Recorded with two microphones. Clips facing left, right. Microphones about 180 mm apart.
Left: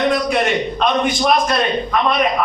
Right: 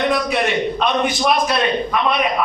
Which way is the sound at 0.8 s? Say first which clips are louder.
Left 1 dB; 5° right (ahead or behind).